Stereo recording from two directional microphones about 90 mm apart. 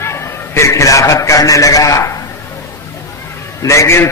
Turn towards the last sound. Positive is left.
turn(degrees=30)  # may be behind; listen again after turning